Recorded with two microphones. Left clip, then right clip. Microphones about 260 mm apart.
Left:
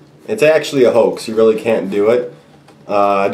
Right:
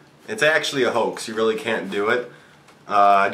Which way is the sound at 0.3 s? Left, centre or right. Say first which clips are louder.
Left 7 dB; right.